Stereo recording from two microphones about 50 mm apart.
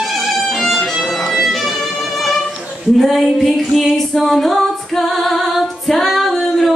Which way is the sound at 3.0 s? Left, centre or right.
Centre.